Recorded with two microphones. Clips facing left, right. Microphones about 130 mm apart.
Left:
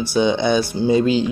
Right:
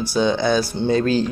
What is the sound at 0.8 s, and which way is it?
Speech, 5° left (ahead or behind).